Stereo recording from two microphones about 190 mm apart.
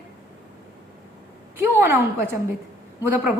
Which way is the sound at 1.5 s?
10° right (ahead or behind).